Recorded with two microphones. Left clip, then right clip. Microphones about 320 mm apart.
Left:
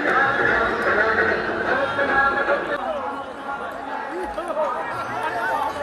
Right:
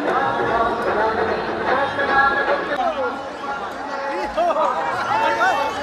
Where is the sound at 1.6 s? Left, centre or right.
Right.